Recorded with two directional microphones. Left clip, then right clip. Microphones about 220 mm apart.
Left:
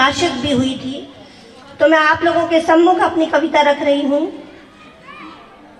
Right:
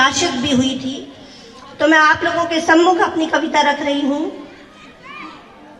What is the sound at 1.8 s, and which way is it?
A woman's voice, 45° right (ahead or behind).